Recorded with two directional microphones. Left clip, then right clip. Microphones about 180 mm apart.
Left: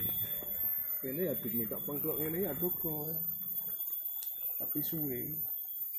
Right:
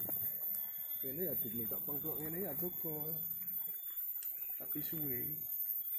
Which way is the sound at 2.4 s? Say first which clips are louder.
Left 7 dB; 15° right (ahead or behind).